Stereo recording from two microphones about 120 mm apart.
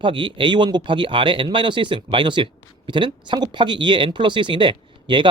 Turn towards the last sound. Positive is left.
turn(degrees=-40)  # may be behind; listen again after turning